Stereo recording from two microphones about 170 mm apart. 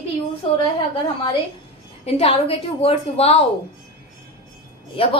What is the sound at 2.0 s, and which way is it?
A woman's voice, 35° left (ahead or behind).